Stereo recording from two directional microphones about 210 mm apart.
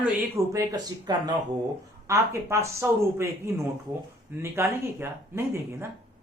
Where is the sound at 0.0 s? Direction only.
10° right (ahead or behind).